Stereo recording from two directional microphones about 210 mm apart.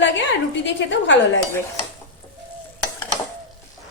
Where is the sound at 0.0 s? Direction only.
60° left (ahead or behind).